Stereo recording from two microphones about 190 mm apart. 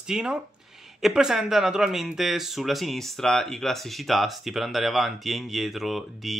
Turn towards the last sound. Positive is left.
turn(degrees=0)  # may be behind; listen again after turning